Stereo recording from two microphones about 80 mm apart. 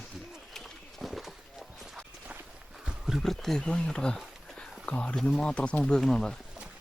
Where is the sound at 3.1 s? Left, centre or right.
Centre.